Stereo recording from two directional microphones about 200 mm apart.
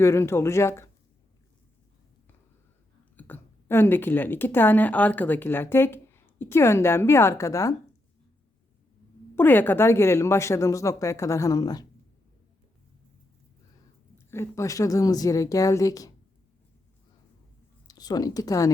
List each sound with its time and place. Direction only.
0.0 s speech: 15° left (ahead or behind)
3.2 s speech: 10° left (ahead or behind)
9.3 s speech: 10° left (ahead or behind)
14.3 s speech: 10° left (ahead or behind)
17.8 s speech: 20° left (ahead or behind)